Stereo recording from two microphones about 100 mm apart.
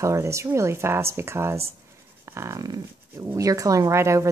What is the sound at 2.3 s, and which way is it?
Dog, 30° right (ahead or behind).